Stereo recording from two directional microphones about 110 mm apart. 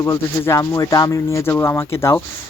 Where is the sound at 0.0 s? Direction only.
25° left (ahead or behind).